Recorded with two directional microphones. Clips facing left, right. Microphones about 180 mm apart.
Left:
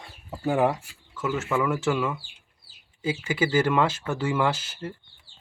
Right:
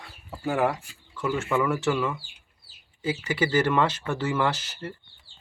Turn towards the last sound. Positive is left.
turn(degrees=10)  # may be behind; listen again after turning